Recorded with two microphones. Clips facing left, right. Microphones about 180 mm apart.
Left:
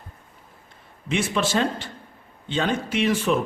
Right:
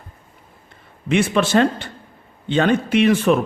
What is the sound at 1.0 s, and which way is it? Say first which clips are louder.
A man's voice: right 6 dB; 65° right (ahead or behind).